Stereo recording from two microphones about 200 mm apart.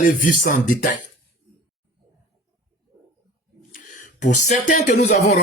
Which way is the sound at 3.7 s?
40° left (ahead or behind).